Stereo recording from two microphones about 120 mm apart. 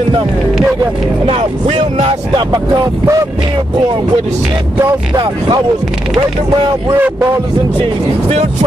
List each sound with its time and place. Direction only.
1.2 s speech: 55° right (ahead or behind)
2.0 s speech: 35° right (ahead or behind)
5.1 s speech: 40° right (ahead or behind)